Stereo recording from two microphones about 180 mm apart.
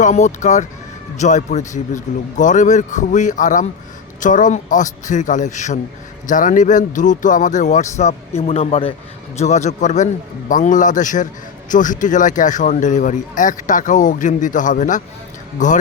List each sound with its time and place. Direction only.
0.0 s a man's voice: 40° left (ahead or behind)